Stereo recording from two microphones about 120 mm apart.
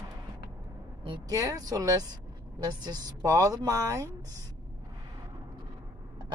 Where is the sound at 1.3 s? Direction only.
25° right (ahead or behind).